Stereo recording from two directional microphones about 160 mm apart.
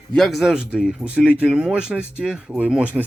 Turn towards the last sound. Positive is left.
turn(degrees=-10)  # may be behind; listen again after turning